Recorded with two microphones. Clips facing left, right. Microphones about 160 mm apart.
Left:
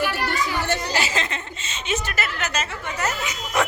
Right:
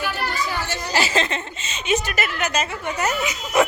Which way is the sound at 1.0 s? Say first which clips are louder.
Right 4 dB; 30° right (ahead or behind).